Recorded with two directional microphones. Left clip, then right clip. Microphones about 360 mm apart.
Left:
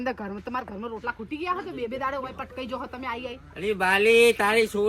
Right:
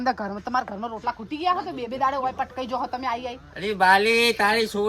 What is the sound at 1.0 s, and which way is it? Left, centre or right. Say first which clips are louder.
Speech: right 5 dB; centre.